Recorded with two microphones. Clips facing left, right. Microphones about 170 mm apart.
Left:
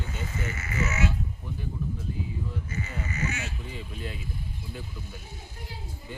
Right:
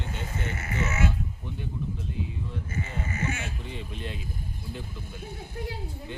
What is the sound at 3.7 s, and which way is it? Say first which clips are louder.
Speech: right 1 dB; 5° left (ahead or behind).